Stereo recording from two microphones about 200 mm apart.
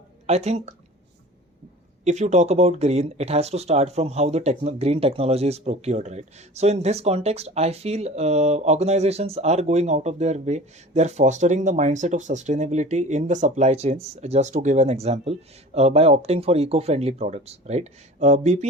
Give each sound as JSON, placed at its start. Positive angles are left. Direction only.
{"t": 0.3, "sound": "speech", "side_deg": -35}
{"t": 2.0, "sound": "speech", "side_deg": -35}